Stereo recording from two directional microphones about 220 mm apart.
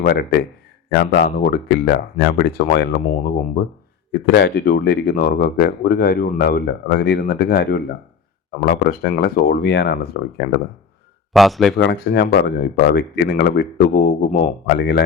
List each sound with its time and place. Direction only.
0.0 s speech: 45° left (ahead or behind)
4.1 s speech: 50° left (ahead or behind)
11.3 s speech: centre (ahead or behind)
11.8 s speech: 50° left (ahead or behind)